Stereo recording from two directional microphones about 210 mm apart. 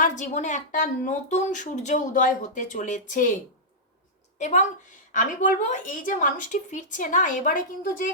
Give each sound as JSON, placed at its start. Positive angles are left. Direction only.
{"t": 0.0, "sound": "speech", "side_deg": 35}
{"t": 4.4, "sound": "a woman's voice", "side_deg": 35}